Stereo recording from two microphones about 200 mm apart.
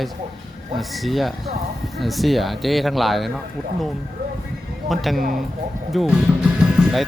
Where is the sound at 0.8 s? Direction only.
Centre (ahead or behind).